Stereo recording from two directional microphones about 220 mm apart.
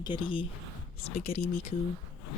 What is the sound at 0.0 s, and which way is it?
Speech, 20° left (ahead or behind).